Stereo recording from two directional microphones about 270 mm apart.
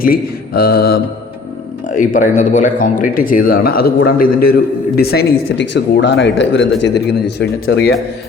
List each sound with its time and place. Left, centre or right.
0.0 s mantra: left
1.9 s speech: left